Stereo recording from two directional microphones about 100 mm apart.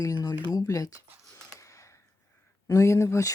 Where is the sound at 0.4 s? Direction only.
35° left (ahead or behind).